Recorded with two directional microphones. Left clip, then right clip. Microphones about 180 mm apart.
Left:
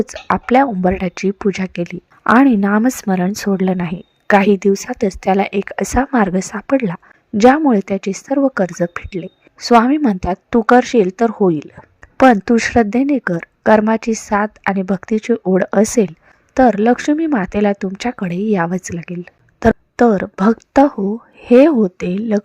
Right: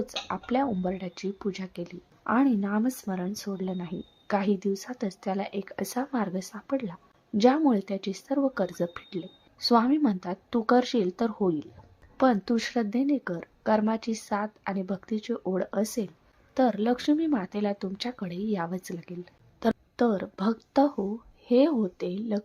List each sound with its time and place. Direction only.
0.0 s a woman's voice: 50° left (ahead or behind)